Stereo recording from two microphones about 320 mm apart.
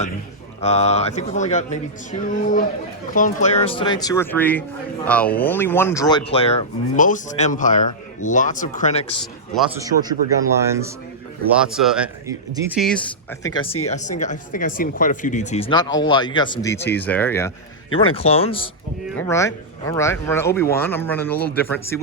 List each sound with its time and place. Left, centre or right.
0.6 s speech: centre
9.5 s a man's voice: centre
13.4 s speech: centre
18.1 s speech: centre